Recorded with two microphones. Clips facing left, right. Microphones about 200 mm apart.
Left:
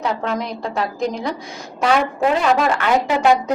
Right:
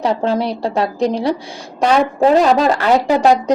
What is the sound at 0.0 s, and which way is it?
A woman's voice, 30° right (ahead or behind).